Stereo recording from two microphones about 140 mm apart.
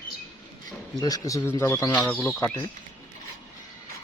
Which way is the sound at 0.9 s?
25° left (ahead or behind).